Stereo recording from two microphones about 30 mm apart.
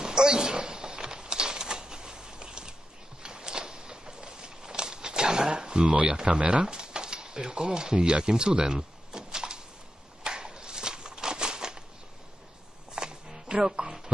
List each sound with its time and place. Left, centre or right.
0.0 s typewriter: right
3.2 s a sound: right
5.9 s speech: right
6.6 s speech: right
8.7 s power windows: right
10.2 s a sound: right
12.9 s music: right